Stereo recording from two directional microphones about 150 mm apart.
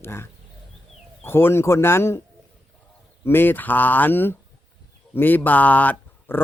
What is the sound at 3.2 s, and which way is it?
A man's voice, 15° left (ahead or behind).